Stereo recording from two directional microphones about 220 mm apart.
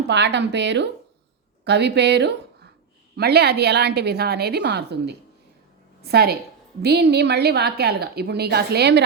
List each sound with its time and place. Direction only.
0.1 s a woman's voice: 50° right (ahead or behind)